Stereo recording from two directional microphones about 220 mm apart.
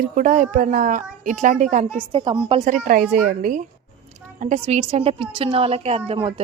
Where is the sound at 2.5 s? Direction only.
30° right (ahead or behind).